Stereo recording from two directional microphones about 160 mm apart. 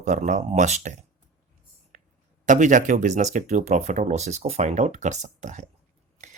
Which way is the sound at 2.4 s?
50° right (ahead or behind).